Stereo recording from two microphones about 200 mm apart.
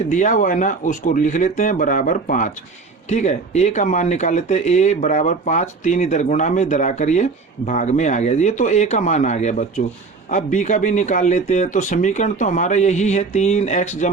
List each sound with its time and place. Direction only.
0.1 s speech: 40° left (ahead or behind)